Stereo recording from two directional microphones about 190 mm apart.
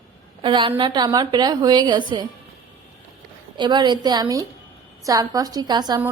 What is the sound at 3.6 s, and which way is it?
A woman's voice, 25° right (ahead or behind).